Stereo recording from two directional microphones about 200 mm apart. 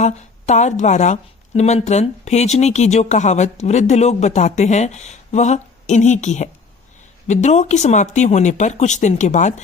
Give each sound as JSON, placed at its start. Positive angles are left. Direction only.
{"t": 0.0, "sound": "speech", "side_deg": 35}